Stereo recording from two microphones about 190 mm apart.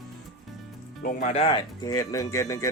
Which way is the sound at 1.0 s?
45° left (ahead or behind).